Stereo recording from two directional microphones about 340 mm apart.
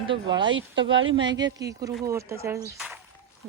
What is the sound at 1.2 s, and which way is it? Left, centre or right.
Speech, centre.